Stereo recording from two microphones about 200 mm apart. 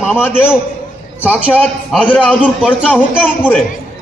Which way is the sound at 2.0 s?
5° left (ahead or behind).